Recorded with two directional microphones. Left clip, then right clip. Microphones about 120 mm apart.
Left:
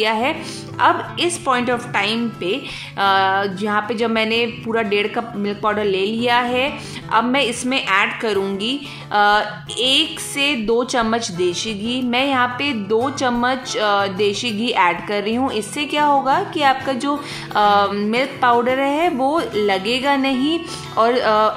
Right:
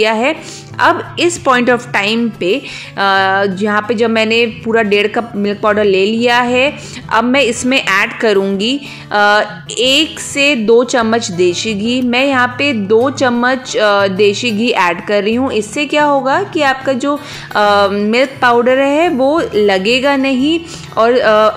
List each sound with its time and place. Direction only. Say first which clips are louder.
0.0 s a woman's voice: right 6 dB; 30° right (ahead or behind)